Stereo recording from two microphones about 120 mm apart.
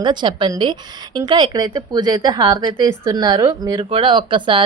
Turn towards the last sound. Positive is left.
turn(degrees=-45)  # may be behind; listen again after turning